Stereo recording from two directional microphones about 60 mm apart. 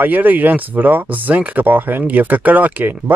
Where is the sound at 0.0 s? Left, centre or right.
Right.